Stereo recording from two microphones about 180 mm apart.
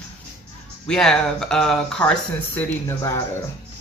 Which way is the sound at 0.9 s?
5° left (ahead or behind).